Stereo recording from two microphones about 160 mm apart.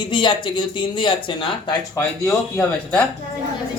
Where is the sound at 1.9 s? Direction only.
20° left (ahead or behind).